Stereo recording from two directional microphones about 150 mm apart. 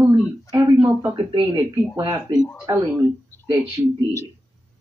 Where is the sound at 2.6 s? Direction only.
10° right (ahead or behind).